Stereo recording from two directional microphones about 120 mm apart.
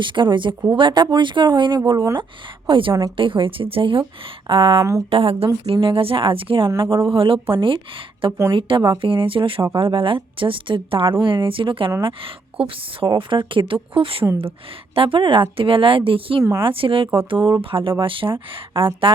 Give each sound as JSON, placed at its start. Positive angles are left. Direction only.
{"t": 0.0, "sound": "a woman's voice", "side_deg": -40}
{"t": 4.8, "sound": "speech", "side_deg": -25}
{"t": 5.1, "sound": "a woman's voice", "side_deg": -55}
{"t": 16.4, "sound": "speech", "side_deg": -25}
{"t": 16.6, "sound": "a woman's voice", "side_deg": -50}